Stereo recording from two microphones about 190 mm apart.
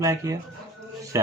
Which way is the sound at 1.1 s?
15° right (ahead or behind).